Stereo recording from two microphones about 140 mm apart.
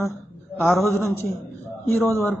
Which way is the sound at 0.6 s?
20° left (ahead or behind).